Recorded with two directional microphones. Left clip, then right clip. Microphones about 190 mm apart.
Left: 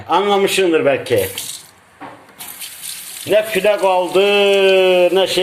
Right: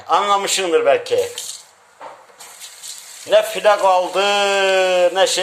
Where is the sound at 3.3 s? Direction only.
5° right (ahead or behind).